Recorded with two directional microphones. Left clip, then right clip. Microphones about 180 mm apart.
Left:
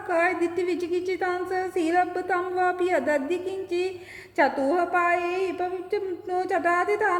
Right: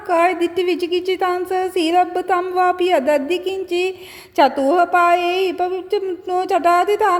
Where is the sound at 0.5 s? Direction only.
15° left (ahead or behind).